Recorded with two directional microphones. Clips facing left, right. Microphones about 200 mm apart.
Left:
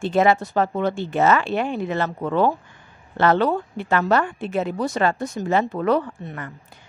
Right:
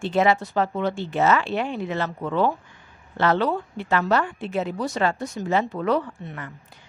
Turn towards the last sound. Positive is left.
turn(degrees=50)  # may be behind; listen again after turning